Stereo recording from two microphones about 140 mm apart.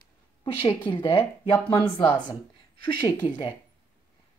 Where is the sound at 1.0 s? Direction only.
40° left (ahead or behind).